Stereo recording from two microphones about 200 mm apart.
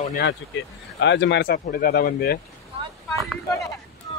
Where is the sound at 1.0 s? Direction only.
60° left (ahead or behind).